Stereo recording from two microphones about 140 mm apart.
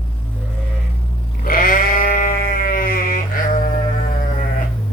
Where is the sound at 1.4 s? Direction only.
85° left.